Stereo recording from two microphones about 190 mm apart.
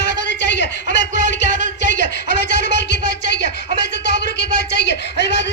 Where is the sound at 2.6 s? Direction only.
65° left (ahead or behind).